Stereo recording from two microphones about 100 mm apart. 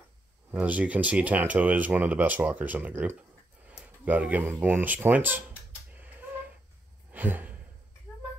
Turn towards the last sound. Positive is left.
turn(degrees=-20)  # may be behind; listen again after turning